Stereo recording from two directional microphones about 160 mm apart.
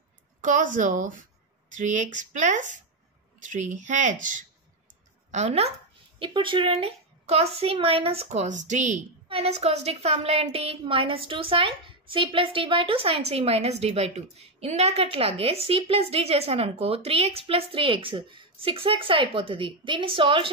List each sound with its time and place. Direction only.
0.4 s speech: 55° right (ahead or behind)
5.3 s speech: 45° right (ahead or behind)
6.1 s a woman's voice: 30° right (ahead or behind)